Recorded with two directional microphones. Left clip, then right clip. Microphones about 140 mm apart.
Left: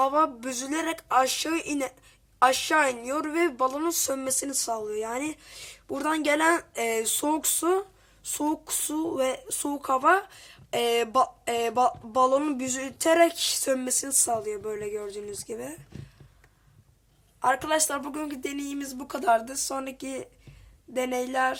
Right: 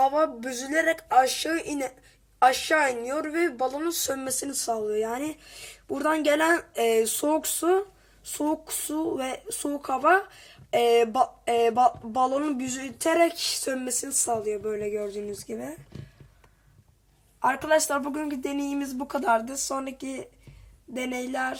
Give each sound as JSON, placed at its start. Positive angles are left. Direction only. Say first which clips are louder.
{"t": 0.0, "sound": "a woman's voice", "louder": "right 1 dB", "side_deg": 25}
{"t": 4.6, "sound": "speech", "louder": "right 6 dB", "side_deg": 10}
{"t": 13.7, "sound": "a woman's voice", "louder": "left 3 dB", "side_deg": 25}
{"t": 14.0, "sound": "speech", "louder": "even", "side_deg": 10}
{"t": 17.4, "sound": "speech", "louder": "right 2 dB", "side_deg": 0}